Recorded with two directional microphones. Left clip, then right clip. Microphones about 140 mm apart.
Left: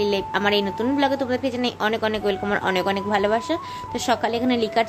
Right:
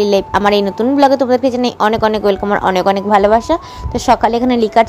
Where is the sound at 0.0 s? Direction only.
45° right (ahead or behind).